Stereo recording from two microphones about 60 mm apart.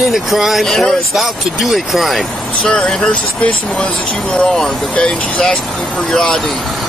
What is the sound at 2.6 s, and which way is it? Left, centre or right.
Speech, centre.